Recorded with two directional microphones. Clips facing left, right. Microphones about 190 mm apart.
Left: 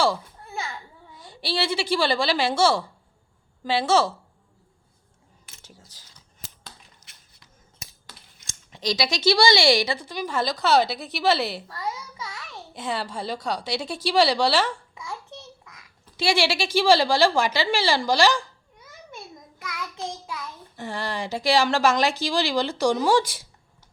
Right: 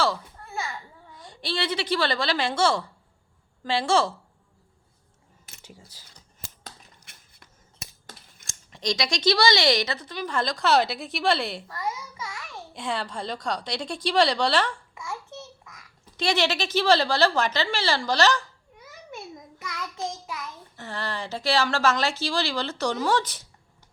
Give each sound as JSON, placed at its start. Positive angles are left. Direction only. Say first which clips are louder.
{"t": 1.1, "sound": "a woman's voice", "louder": "left 3 dB", "side_deg": 5}
{"t": 5.6, "sound": "coin", "louder": "right 4 dB", "side_deg": -10}
{"t": 6.7, "sound": "a sound", "louder": "right 2 dB", "side_deg": -55}
{"t": 8.4, "sound": "speech", "louder": "left 1 dB", "side_deg": 0}
{"t": 12.7, "sound": "speech", "louder": "left 1 dB", "side_deg": 5}
{"t": 16.1, "sound": "speech", "louder": "left 2 dB", "side_deg": 10}
{"t": 20.7, "sound": "speech", "louder": "left 3 dB", "side_deg": 15}